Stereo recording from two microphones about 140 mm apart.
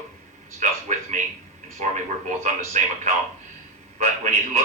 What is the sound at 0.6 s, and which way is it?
Speech, 60° right (ahead or behind).